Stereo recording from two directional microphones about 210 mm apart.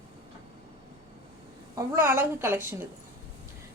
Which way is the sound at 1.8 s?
10° right (ahead or behind).